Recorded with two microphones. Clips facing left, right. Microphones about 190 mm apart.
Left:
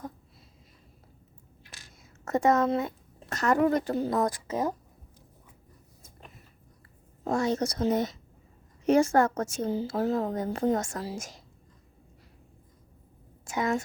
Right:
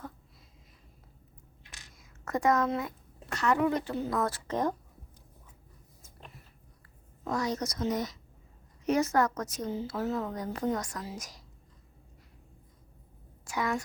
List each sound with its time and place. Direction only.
2.2 s a woman's voice: 25° left (ahead or behind)
3.2 s speech: 45° left (ahead or behind)
4.1 s a woman's voice: 15° left (ahead or behind)
7.3 s a woman's voice: 25° left (ahead or behind)
13.4 s a sound: 25° left (ahead or behind)